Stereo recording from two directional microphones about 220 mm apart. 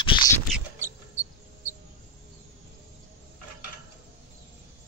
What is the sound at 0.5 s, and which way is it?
Mouse, 10° right (ahead or behind).